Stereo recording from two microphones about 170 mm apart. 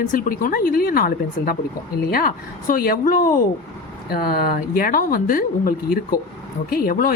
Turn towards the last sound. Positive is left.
turn(degrees=60)  # may be behind; listen again after turning